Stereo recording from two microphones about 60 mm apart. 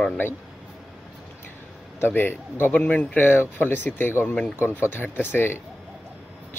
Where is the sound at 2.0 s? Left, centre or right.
Left.